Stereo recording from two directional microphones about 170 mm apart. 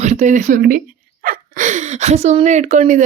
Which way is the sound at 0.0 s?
40° right (ahead or behind).